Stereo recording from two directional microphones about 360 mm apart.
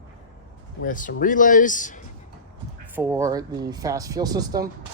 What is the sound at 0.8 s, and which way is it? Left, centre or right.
Speech, left.